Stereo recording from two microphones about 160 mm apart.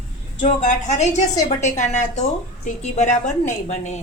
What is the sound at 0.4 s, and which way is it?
A woman's voice, 50° left (ahead or behind).